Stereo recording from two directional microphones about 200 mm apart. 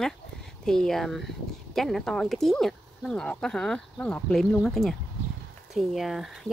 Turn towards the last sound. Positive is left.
turn(degrees=0)  # may be behind; listen again after turning